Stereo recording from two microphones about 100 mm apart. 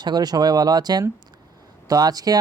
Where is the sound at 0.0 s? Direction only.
45° right (ahead or behind).